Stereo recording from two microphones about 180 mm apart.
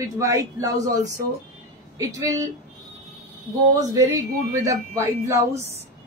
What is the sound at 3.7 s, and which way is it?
A woman's voice, 20° right (ahead or behind).